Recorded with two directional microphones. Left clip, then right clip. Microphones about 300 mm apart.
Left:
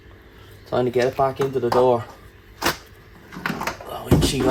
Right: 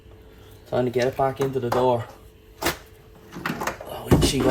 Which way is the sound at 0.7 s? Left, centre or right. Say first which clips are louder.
Left 2 dB; centre.